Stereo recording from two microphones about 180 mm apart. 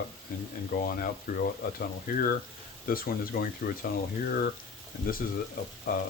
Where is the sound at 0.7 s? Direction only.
60° left (ahead or behind).